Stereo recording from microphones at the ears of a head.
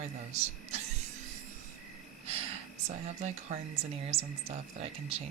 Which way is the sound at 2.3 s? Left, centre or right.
Right.